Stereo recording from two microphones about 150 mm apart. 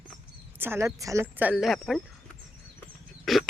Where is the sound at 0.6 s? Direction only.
15° right (ahead or behind).